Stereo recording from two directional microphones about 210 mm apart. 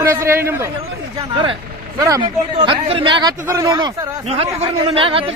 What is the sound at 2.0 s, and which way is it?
A man's voice, 15° right (ahead or behind).